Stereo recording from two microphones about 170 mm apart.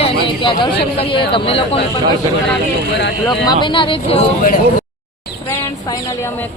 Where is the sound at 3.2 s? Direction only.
25° left (ahead or behind).